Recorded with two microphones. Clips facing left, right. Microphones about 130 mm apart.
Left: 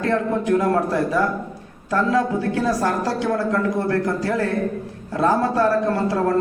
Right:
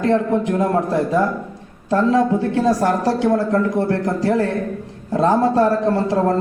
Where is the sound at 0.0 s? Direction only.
20° right (ahead or behind).